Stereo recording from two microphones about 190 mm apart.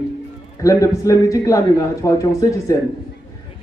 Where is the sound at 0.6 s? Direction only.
15° left (ahead or behind).